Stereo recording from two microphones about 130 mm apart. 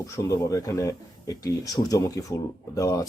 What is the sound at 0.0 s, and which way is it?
Speech, 25° left (ahead or behind).